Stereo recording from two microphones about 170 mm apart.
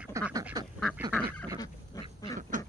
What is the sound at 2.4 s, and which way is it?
Duck, 50° right (ahead or behind).